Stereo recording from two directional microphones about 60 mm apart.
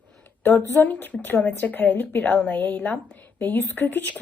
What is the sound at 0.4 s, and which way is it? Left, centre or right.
Speech, left.